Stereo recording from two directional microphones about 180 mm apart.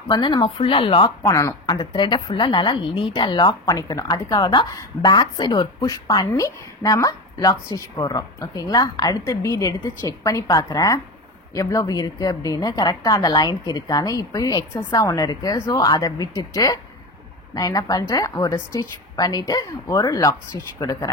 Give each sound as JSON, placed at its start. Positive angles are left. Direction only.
{"t": 0.1, "sound": "speech", "side_deg": 25}